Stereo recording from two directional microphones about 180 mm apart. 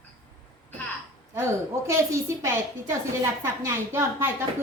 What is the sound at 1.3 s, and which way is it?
A woman's voice, 15° right (ahead or behind).